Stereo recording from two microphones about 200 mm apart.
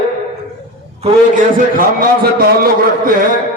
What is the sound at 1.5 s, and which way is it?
A man's voice, 45° right (ahead or behind).